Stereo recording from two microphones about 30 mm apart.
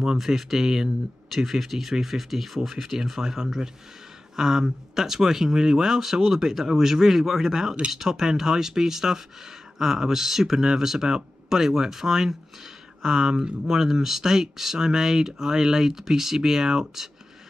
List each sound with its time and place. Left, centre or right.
0.2 s speech: centre